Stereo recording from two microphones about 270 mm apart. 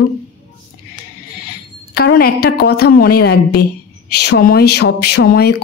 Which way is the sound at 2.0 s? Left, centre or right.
Left.